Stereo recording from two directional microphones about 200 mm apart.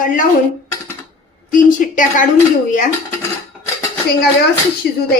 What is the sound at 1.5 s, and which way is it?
Speech, 40° left (ahead or behind).